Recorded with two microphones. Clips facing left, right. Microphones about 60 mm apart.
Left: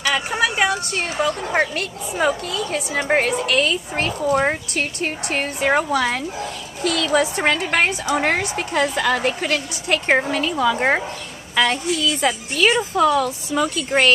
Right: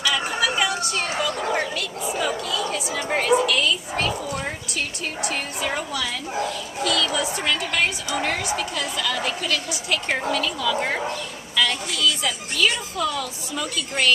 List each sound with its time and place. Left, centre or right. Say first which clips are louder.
0.0 s a woman's voice: left 3 dB; left